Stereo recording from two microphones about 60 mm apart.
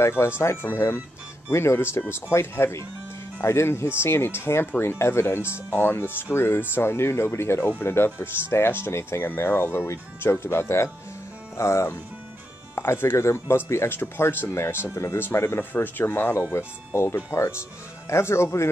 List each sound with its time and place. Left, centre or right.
0.0 s speech: left
16.5 s speech: left